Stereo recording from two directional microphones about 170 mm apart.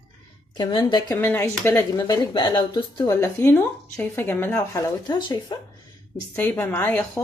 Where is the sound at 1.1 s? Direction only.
15° left (ahead or behind).